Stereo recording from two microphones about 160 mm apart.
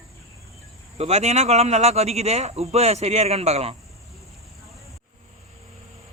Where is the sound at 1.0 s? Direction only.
45° right (ahead or behind).